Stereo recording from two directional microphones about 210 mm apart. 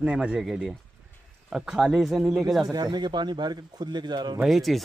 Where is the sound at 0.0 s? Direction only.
5° right (ahead or behind).